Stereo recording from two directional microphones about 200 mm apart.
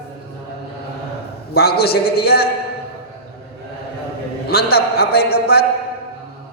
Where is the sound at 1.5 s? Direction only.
50° left (ahead or behind).